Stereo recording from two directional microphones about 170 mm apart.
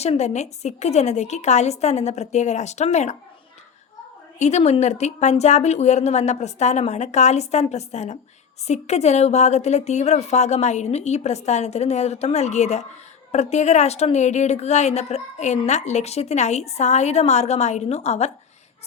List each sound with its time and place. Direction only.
0.0 s a woman's voice: 40° left (ahead or behind)
4.4 s a woman's voice: 40° left (ahead or behind)